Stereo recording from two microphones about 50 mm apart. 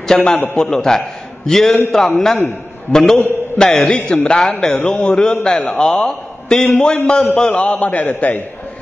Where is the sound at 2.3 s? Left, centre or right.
Left.